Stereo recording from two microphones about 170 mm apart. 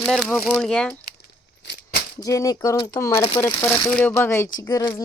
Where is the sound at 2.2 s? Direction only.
20° left (ahead or behind).